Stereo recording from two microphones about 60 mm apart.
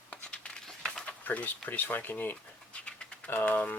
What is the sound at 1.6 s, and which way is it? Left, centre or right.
Speech, left.